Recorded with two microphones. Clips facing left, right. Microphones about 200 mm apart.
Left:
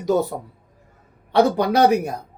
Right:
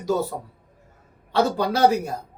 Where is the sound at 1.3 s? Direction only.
15° left (ahead or behind).